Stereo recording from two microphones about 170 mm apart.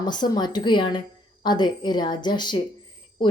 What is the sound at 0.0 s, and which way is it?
Speech, 25° left (ahead or behind).